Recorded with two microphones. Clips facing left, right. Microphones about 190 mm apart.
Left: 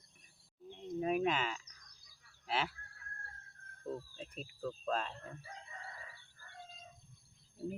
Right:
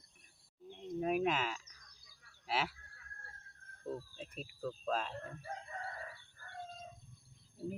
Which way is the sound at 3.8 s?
Centre (ahead or behind).